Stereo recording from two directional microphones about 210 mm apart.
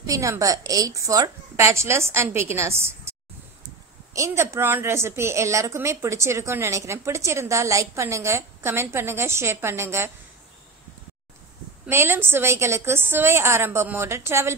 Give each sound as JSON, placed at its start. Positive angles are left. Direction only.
{"t": 0.0, "sound": "a woman's voice", "side_deg": -15}
{"t": 11.8, "sound": "a woman's voice", "side_deg": -10}